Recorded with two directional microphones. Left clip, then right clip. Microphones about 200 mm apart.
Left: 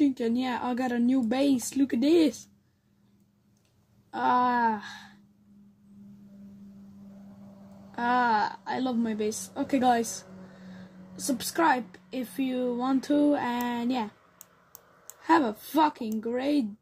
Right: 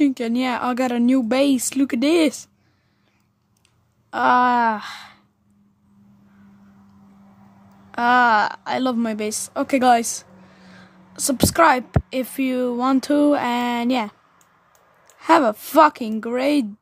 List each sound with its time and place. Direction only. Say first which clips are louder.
0.0 s speech: right 6 dB; 40° right (ahead or behind)
4.1 s speech: right 8 dB; 40° right (ahead or behind)
7.9 s a woman's voice: right 9 dB; 40° right (ahead or behind)
15.2 s a woman's voice: right 8 dB; 45° right (ahead or behind)